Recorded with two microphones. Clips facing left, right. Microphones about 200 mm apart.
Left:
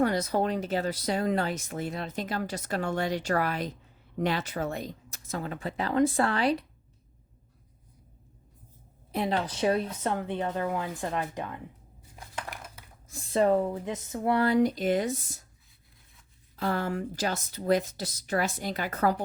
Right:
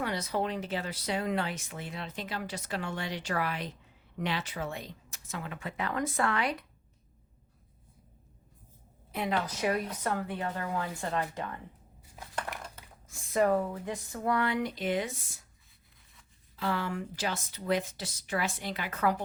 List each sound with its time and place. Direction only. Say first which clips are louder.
0.0 s speech: left 6 dB; 45° left (ahead or behind)
9.1 s speech: left 3 dB; 30° left (ahead or behind); by 11.6 s 15° left (ahead or behind)
12.5 s a sound: right 1 dB; 5° left (ahead or behind)
13.1 s speech: left 3 dB; 35° left (ahead or behind)
14.3 s speech: left 10 dB; 35° left (ahead or behind)
16.6 s speech: left 3 dB; 45° left (ahead or behind)